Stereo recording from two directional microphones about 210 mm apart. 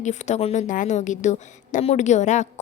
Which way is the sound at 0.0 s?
35° left (ahead or behind).